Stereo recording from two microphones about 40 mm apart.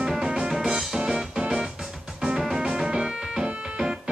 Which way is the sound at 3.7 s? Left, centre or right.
Centre.